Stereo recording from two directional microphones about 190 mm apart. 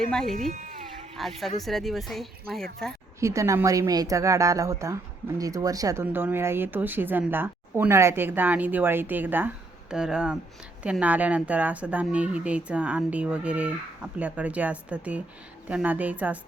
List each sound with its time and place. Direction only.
0.1 s speech: 5° left (ahead or behind)
0.5 s speech: 45° right (ahead or behind)
1.1 s speech: centre (ahead or behind)
3.2 s a woman's voice: 15° right (ahead or behind)